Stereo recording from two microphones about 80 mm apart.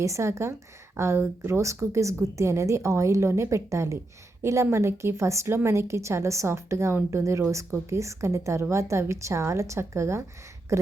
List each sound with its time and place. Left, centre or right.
0.0 s a woman's voice: right